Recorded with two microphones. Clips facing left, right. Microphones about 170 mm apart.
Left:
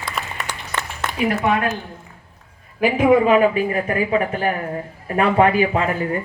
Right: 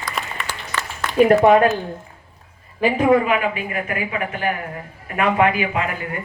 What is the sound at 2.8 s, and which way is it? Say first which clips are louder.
Speech: left 1 dB; 10° left (ahead or behind).